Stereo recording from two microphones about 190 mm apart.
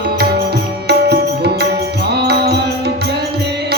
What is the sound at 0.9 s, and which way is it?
Music, 60° right (ahead or behind).